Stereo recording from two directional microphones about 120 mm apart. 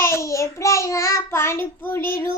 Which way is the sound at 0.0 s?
25° left (ahead or behind).